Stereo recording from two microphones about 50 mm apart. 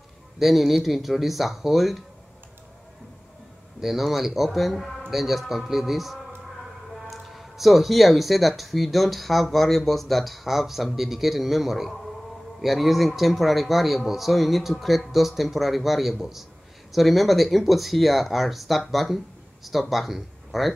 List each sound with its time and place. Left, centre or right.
0.4 s speech: centre
3.8 s speech: centre